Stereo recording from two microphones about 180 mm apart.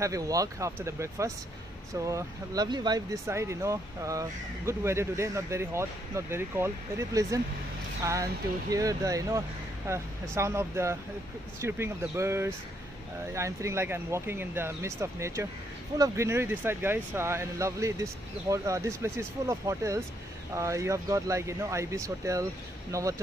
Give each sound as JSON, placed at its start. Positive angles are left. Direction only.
{"t": 0.0, "sound": "speech", "side_deg": -20}